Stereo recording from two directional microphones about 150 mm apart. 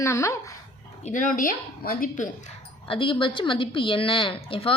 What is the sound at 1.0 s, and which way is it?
A woman's voice, 55° left (ahead or behind).